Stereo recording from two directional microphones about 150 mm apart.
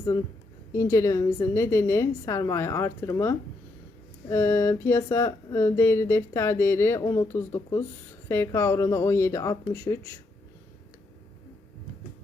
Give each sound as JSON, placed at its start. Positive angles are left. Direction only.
{"t": 0.7, "sound": "speech", "side_deg": 20}